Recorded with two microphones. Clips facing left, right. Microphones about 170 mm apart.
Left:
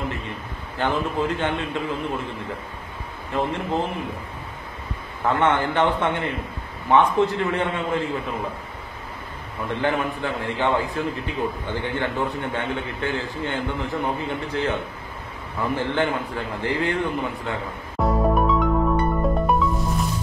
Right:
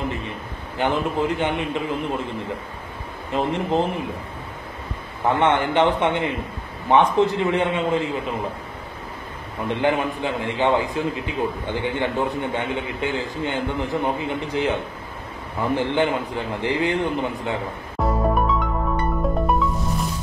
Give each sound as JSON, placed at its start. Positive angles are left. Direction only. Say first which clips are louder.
{"t": 0.7, "sound": "a man's voice", "louder": "right 2 dB", "side_deg": -15}
{"t": 3.3, "sound": "a man's voice", "louder": "right 2 dB", "side_deg": -20}
{"t": 5.3, "sound": "a man's voice", "louder": "right 2 dB", "side_deg": -20}
{"t": 9.7, "sound": "a man's voice", "louder": "right 2 dB", "side_deg": -20}
{"t": 18.0, "sound": "music", "louder": "left 1 dB", "side_deg": 0}